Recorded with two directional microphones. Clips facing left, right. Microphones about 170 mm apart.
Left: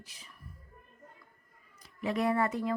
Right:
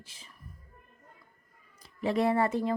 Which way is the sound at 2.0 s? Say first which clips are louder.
Right 3 dB; 30° right (ahead or behind).